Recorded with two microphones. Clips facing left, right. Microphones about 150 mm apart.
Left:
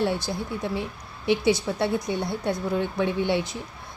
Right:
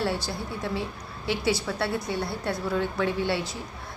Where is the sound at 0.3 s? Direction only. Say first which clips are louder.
Left 3 dB; 15° left (ahead or behind).